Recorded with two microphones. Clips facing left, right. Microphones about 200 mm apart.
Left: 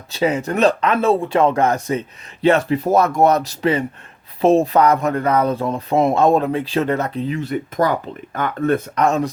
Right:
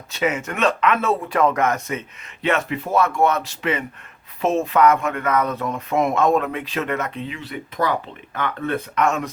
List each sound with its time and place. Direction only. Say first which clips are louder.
0.1 s speech: left 4 dB; 35° left (ahead or behind)